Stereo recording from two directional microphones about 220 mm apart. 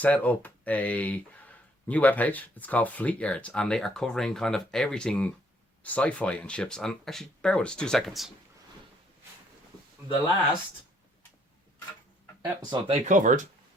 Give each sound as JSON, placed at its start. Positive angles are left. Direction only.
{"t": 0.0, "sound": "speech", "side_deg": 5}
{"t": 12.7, "sound": "speech", "side_deg": -30}